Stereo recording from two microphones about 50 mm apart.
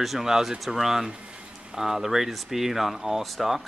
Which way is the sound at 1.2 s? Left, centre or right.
Right.